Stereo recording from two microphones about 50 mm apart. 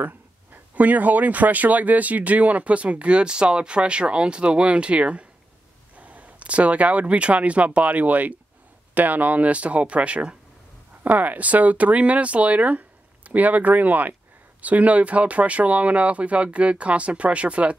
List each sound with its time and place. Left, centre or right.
0.0 s speech: right